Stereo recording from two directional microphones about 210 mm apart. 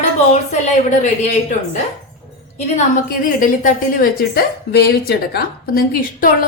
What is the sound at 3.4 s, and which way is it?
A woman's voice, 40° left (ahead or behind).